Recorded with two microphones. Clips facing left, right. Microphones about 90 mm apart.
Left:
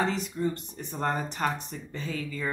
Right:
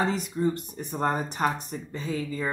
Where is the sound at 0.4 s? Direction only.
15° right (ahead or behind).